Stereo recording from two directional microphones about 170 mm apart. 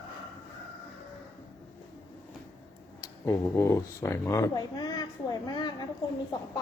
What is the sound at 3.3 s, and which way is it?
A child's voice, 15° left (ahead or behind).